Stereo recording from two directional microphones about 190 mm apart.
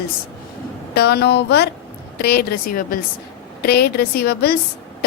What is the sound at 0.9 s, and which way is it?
A woman's voice, 60° left (ahead or behind).